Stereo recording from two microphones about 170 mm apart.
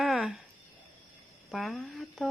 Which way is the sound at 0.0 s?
Centre (ahead or behind).